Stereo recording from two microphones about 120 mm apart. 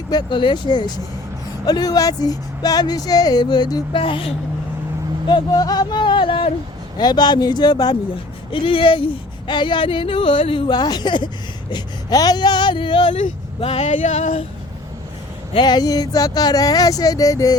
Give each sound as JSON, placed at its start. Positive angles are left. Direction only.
{"t": 0.1, "sound": "speech", "side_deg": 40}
{"t": 3.9, "sound": "speech", "side_deg": 45}
{"t": 5.3, "sound": "speech", "side_deg": 35}
{"t": 8.6, "sound": "speech", "side_deg": 45}
{"t": 13.6, "sound": "speech", "side_deg": 55}
{"t": 13.8, "sound": "female singing", "side_deg": 85}
{"t": 15.5, "sound": "speech", "side_deg": 35}